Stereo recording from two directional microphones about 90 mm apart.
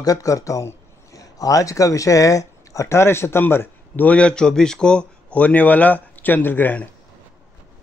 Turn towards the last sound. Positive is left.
turn(degrees=20)  # may be behind; listen again after turning